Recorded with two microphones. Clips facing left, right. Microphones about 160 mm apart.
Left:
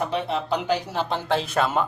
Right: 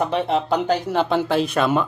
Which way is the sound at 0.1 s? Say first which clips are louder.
Right 5 dB; 45° right (ahead or behind).